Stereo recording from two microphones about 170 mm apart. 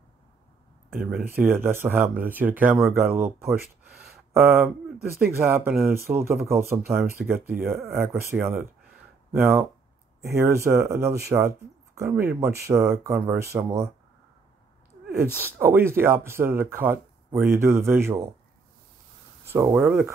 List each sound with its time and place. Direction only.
1.1 s speech: 10° right (ahead or behind)
5.7 s speech: centre (ahead or behind)
5.9 s speech: 15° right (ahead or behind)
6.5 s speech: centre (ahead or behind)
10.2 s speech: 15° right (ahead or behind)
15.4 s speech: 10° right (ahead or behind)
19.4 s speech: 15° right (ahead or behind)